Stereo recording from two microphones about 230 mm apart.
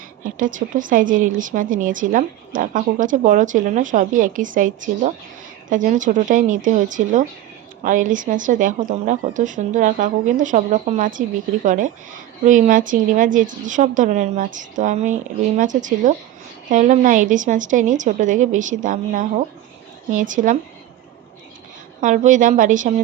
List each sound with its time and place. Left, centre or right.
0.3 s a woman's voice: right
22.0 s a woman's voice: right